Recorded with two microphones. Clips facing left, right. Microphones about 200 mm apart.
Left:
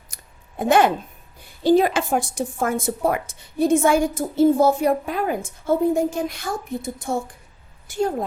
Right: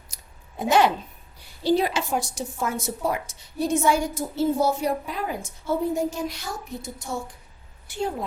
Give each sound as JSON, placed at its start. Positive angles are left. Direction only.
{"t": 0.1, "sound": "scissors", "side_deg": 55}
{"t": 0.6, "sound": "a woman's voice", "side_deg": 50}